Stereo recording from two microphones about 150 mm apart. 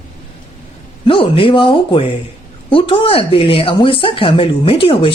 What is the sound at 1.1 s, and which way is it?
Speech, 35° left (ahead or behind).